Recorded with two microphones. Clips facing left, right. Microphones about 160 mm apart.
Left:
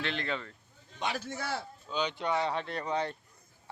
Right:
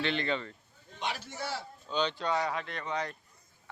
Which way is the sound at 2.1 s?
20° left (ahead or behind).